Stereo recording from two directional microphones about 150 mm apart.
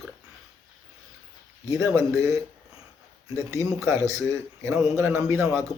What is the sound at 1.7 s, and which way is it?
Speech, 20° right (ahead or behind).